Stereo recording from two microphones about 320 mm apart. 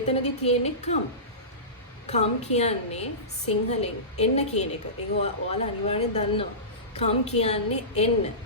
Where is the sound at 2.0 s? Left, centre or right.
Left.